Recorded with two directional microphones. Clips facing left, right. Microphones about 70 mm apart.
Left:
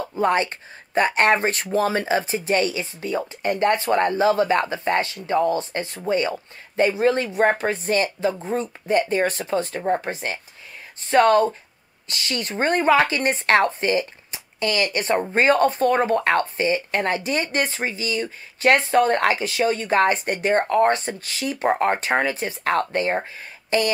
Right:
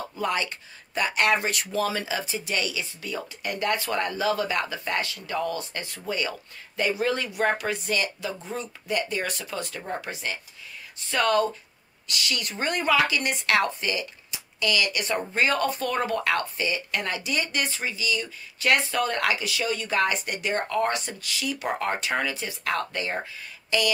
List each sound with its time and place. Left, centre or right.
0.0 s speech: left